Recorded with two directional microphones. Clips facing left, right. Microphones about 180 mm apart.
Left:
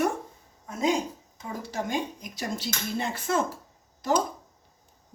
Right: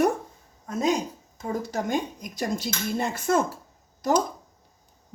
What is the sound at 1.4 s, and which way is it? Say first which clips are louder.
Speech: right 5 dB; 45° right (ahead or behind).